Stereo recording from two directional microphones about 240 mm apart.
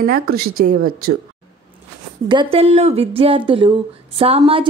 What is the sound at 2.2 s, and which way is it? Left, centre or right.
A woman's voice, centre.